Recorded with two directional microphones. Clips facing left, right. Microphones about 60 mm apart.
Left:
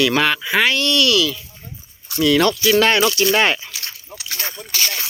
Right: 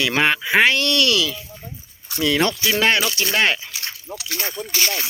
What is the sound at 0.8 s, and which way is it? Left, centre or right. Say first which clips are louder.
Speech: left 2 dB; right.